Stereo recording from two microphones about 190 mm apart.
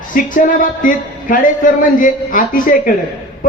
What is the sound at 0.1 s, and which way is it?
Speech, 45° left (ahead or behind).